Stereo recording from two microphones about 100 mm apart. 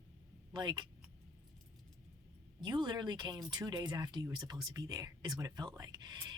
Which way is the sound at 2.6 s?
50° right (ahead or behind).